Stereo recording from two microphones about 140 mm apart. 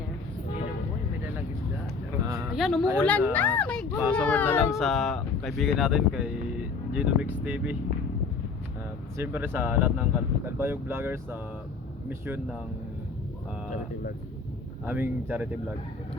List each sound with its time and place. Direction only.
2.2 s a sound: 20° right (ahead or behind)
2.6 s speech: centre (ahead or behind)
4.7 s speech: centre (ahead or behind)
9.1 s speech: 15° right (ahead or behind)
14.8 s speech: 15° right (ahead or behind)